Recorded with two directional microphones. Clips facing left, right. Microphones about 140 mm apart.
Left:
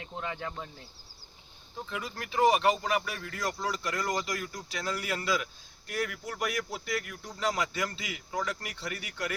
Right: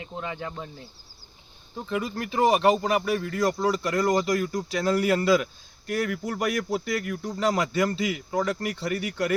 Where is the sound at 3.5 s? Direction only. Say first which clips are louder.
Right 6 dB; 45° right (ahead or behind); by 5.4 s 65° right (ahead or behind).